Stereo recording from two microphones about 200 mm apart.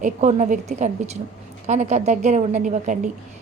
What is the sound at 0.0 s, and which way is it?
A woman's voice, 35° right (ahead or behind).